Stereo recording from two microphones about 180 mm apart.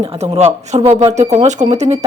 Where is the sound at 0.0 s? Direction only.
30° right (ahead or behind).